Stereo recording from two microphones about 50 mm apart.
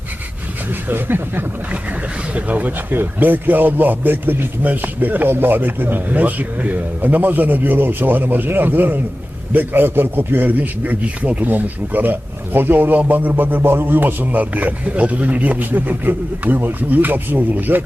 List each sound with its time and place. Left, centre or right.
0.9 s speech: right
2.3 s a man's voice: right
13.6 s a man's voice: right